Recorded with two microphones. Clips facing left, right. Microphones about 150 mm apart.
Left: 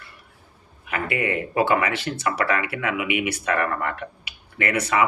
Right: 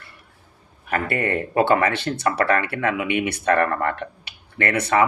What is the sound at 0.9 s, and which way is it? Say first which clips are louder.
Speech: right 2 dB; 45° right (ahead or behind).